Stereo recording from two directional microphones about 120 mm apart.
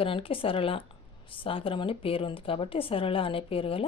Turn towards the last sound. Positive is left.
turn(degrees=50)  # may be behind; listen again after turning